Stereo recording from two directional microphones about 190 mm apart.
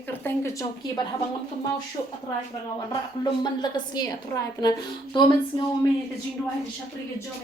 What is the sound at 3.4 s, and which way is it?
Speech, 20° left (ahead or behind).